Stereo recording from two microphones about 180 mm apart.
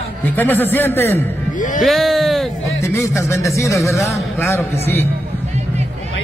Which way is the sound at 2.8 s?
15° left (ahead or behind).